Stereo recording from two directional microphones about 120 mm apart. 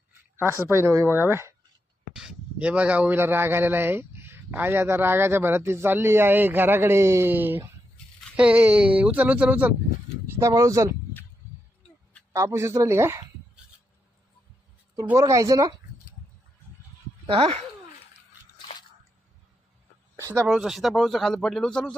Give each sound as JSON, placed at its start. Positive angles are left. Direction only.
{"t": 0.3, "sound": "speech", "side_deg": -20}
{"t": 2.1, "sound": "speech", "side_deg": -5}
{"t": 10.2, "sound": "speech", "side_deg": -25}
{"t": 12.3, "sound": "speech", "side_deg": -25}
{"t": 15.1, "sound": "speech", "side_deg": -25}
{"t": 17.2, "sound": "speech", "side_deg": -50}
{"t": 20.1, "sound": "a sound", "side_deg": -25}
{"t": 20.4, "sound": "speech", "side_deg": -5}